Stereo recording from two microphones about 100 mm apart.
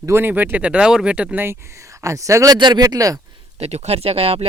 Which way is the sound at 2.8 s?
35° right (ahead or behind).